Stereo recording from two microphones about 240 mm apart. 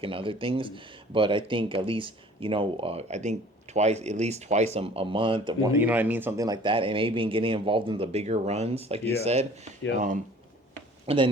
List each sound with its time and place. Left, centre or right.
0.0 s speech: right
11.0 s speech: right